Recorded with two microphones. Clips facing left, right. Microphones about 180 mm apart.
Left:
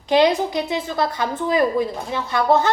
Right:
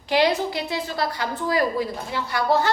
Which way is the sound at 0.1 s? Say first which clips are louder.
Left 4 dB; 20° left (ahead or behind).